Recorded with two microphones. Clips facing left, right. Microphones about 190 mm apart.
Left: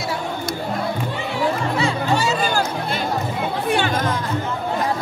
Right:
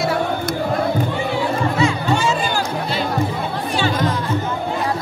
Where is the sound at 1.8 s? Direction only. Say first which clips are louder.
Right 2 dB; 35° left (ahead or behind).